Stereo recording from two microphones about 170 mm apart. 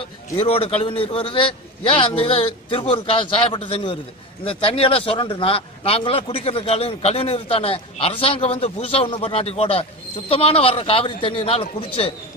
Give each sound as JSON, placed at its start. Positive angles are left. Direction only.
{"t": 0.4, "sound": "a man's voice", "side_deg": 35}